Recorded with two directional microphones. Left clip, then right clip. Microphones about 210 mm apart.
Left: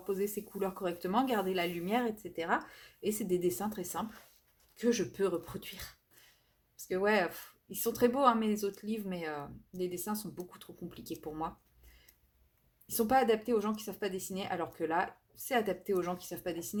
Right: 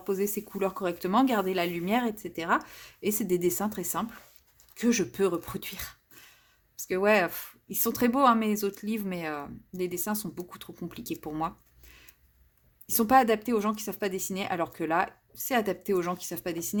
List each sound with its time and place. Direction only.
0.1 s speech: 40° right (ahead or behind)
12.9 s speech: 40° right (ahead or behind)